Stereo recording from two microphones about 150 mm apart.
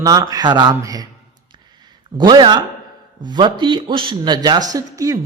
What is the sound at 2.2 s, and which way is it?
Speech, 30° right (ahead or behind).